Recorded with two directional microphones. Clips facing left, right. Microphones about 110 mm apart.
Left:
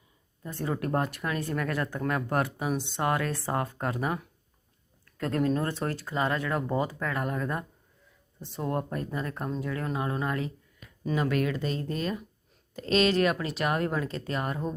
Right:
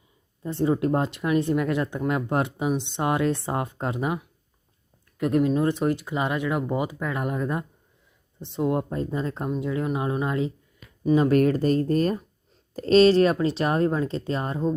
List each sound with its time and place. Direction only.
0.4 s speech: 25° right (ahead or behind)
11.3 s speech: 45° right (ahead or behind); by 14.8 s 25° right (ahead or behind)